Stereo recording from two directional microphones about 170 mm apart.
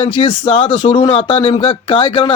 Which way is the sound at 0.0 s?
30° left (ahead or behind).